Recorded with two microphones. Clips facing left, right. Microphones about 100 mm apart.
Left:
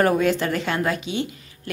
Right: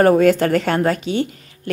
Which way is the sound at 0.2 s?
50° right (ahead or behind).